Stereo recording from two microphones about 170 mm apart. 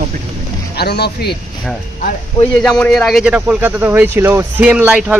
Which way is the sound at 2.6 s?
5° left (ahead or behind).